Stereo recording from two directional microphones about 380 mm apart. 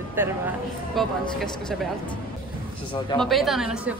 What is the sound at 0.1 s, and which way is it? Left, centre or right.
Speech, centre.